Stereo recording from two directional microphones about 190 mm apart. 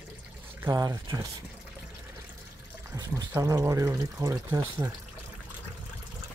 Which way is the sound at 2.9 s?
15° right (ahead or behind).